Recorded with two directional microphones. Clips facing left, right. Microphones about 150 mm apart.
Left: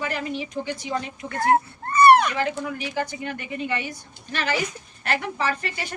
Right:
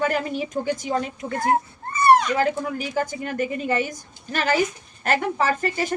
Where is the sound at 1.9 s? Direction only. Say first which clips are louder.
Left 2 dB; 65° left (ahead or behind).